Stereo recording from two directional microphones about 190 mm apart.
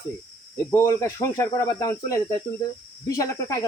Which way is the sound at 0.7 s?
15° left (ahead or behind).